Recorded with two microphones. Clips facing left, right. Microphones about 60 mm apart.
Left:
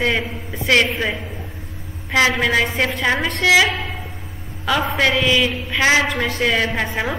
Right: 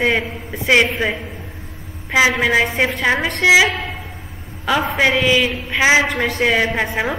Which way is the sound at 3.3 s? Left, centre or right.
Right.